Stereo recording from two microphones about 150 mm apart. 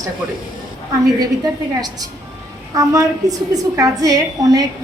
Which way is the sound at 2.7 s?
25° right (ahead or behind).